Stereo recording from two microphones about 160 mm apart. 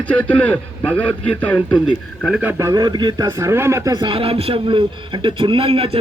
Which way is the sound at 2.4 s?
15° right (ahead or behind).